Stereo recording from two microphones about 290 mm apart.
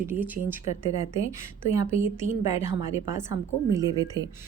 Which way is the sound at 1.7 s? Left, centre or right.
Centre.